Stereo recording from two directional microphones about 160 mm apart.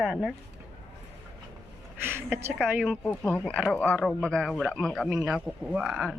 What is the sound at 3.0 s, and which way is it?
Speech, 5° left (ahead or behind).